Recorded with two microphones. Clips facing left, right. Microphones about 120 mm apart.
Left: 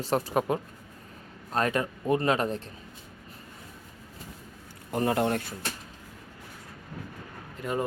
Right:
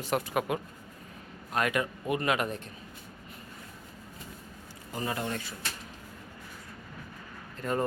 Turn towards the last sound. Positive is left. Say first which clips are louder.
# even
turn(degrees=10)  # may be behind; listen again after turning